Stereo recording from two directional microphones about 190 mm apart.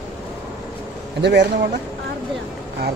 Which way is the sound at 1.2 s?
65° right (ahead or behind).